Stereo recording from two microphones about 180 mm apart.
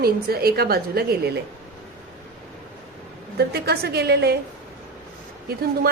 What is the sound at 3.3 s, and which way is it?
A woman's voice, 65° right (ahead or behind).